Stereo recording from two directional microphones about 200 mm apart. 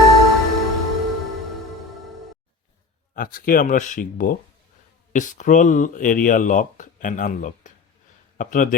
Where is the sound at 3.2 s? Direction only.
45° left (ahead or behind).